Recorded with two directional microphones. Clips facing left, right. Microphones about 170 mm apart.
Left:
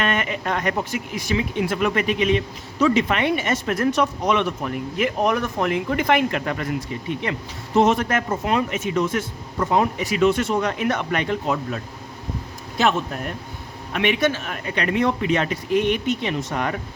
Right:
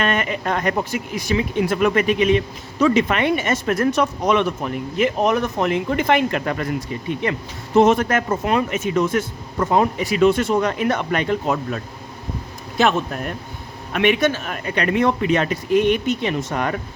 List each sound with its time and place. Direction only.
0.0 s speech: 40° right (ahead or behind)
4.6 s speech: 25° right (ahead or behind)
6.3 s speech: 45° right (ahead or behind)
7.8 s speech: 50° right (ahead or behind)
13.9 s speech: 50° right (ahead or behind)